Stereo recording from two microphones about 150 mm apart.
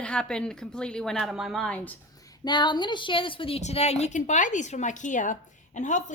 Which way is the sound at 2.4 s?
30° left (ahead or behind).